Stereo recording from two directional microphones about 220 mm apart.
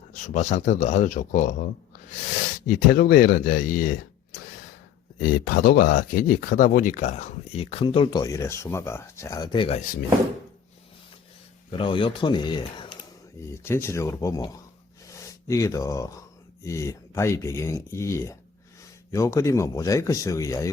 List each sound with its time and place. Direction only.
0.3 s speech: 30° left (ahead or behind)
2.6 s speech: 45° left (ahead or behind)
5.2 s speech: 45° left (ahead or behind); by 9.8 s 25° left (ahead or behind)
11.7 s speech: 25° left (ahead or behind)